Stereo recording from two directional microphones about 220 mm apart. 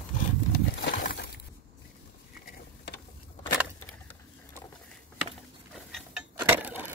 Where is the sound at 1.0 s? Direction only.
45° left (ahead or behind).